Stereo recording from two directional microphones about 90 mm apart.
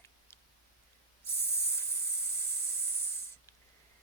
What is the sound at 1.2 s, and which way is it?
Hiss, 30° left (ahead or behind).